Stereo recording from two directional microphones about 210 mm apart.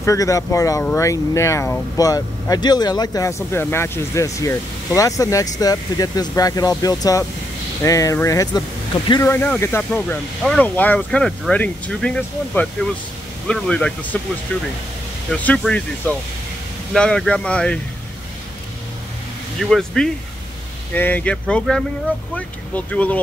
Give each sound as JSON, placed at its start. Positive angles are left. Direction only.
{"t": 0.0, "sound": "speech", "side_deg": 15}
{"t": 19.7, "sound": "speech", "side_deg": 0}